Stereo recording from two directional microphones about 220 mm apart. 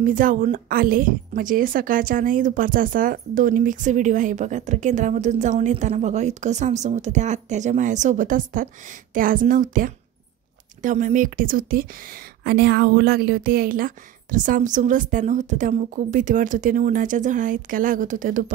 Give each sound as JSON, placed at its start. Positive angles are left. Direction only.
{"t": 0.0, "sound": "a woman's voice", "side_deg": -40}